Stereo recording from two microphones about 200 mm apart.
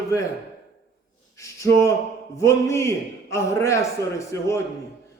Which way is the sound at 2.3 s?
15° left (ahead or behind).